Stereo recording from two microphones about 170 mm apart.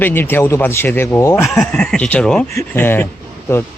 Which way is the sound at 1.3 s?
Centre (ahead or behind).